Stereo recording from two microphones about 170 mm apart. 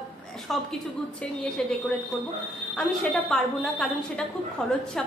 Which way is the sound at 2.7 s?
Centre (ahead or behind).